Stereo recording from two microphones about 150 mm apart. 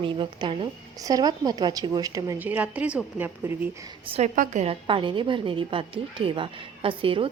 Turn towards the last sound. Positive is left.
turn(degrees=-35)  # may be behind; listen again after turning